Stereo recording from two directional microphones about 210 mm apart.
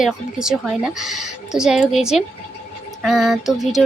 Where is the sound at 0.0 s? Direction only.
5° right (ahead or behind).